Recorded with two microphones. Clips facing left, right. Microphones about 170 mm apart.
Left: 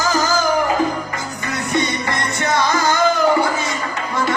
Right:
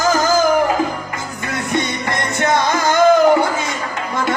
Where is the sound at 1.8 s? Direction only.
50° right (ahead or behind).